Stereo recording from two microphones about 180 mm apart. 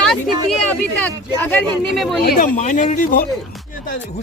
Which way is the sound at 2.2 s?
55° left (ahead or behind).